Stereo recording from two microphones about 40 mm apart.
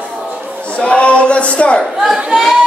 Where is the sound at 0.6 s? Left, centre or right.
Left.